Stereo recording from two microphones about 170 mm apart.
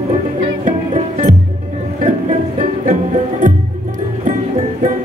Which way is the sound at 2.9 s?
50° right (ahead or behind).